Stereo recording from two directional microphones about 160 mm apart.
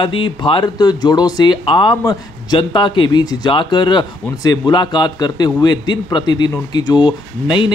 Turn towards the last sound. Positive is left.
turn(degrees=30)  # may be behind; listen again after turning